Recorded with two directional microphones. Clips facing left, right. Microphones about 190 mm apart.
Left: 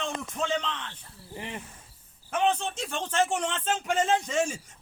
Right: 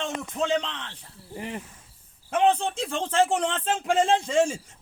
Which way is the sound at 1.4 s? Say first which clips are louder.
Right 4 dB; 40° right (ahead or behind).